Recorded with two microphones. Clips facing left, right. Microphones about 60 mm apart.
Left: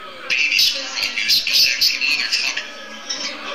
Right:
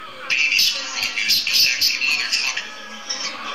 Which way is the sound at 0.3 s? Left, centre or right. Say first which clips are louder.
Left 1 dB; right.